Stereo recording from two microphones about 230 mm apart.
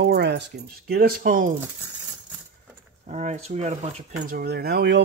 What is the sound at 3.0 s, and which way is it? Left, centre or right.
Speech, right.